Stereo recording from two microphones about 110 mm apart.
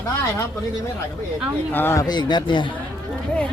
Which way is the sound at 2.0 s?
40° left (ahead or behind).